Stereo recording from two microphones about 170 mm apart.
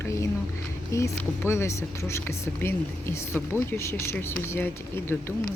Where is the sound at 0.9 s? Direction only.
15° left (ahead or behind).